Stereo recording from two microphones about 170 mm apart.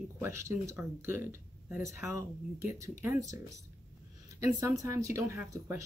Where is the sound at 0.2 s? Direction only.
15° right (ahead or behind).